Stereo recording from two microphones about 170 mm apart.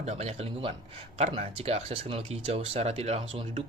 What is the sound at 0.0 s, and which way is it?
Speech, 40° right (ahead or behind).